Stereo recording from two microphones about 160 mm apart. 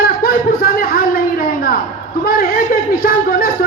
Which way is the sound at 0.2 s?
65° left (ahead or behind).